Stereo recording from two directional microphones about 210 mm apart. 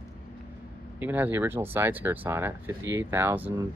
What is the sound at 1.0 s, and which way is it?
Speech, 10° right (ahead or behind).